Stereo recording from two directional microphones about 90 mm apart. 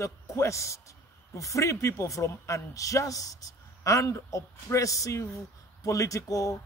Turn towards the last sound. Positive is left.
turn(degrees=40)  # may be behind; listen again after turning